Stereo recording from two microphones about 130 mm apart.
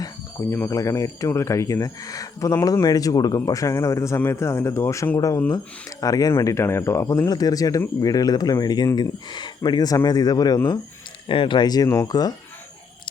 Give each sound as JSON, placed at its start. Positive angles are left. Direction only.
{"t": 0.0, "sound": "speech", "side_deg": 20}
{"t": 11.3, "sound": "speech", "side_deg": 40}